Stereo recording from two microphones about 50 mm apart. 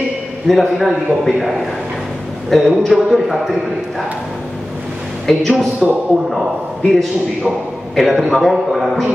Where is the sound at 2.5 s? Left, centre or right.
Centre.